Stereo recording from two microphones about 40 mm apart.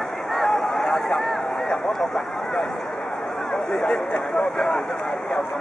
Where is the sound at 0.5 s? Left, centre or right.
Centre.